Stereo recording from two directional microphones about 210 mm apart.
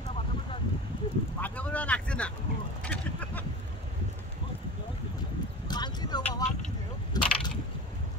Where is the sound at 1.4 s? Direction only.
5° left (ahead or behind).